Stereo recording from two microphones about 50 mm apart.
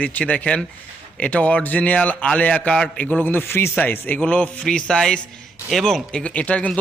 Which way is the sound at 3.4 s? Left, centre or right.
Left.